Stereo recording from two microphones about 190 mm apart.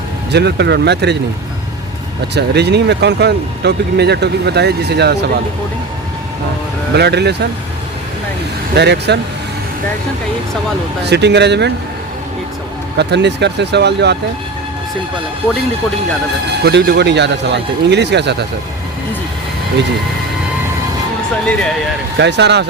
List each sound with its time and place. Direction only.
0.3 s speech: 60° right (ahead or behind)
2.3 s speech: 60° right (ahead or behind)
6.9 s speech: 60° right (ahead or behind)
8.7 s speech: 60° right (ahead or behind)
11.0 s speech: 60° right (ahead or behind)
13.0 s speech: 65° right (ahead or behind)
16.6 s speech: 60° right (ahead or behind)
22.2 s speech: 65° right (ahead or behind)